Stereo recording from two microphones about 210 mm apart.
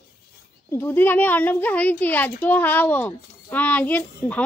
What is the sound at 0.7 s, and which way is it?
A child's voice, 10° left (ahead or behind).